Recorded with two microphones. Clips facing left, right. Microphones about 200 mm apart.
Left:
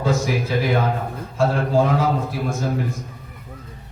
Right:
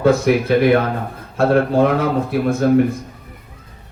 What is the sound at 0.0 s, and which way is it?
A man's voice, 65° right (ahead or behind).